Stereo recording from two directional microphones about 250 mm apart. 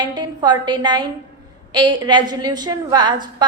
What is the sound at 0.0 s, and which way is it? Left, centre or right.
A woman's voice, centre.